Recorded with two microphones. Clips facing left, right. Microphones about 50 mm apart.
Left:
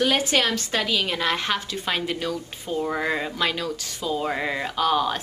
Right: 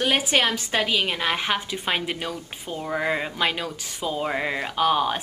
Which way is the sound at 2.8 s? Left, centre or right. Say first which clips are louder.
Right 1 dB; centre.